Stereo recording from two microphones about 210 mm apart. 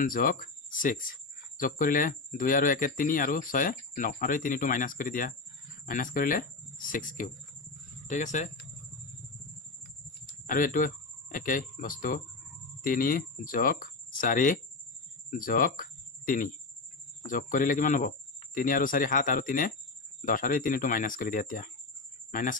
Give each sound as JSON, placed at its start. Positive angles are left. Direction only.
{"t": 0.0, "sound": "speech", "side_deg": 40}
{"t": 1.6, "sound": "speech", "side_deg": 40}
{"t": 10.2, "sound": "a sound", "side_deg": 40}
{"t": 11.3, "sound": "speech", "side_deg": 40}